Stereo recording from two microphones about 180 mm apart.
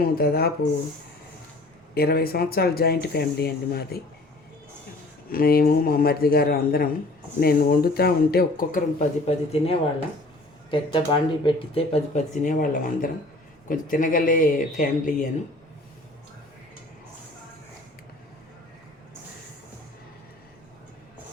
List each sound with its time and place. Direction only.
0.0 s speech: 60° left (ahead or behind)
2.0 s speech: 60° left (ahead or behind)
5.3 s speech: 55° left (ahead or behind)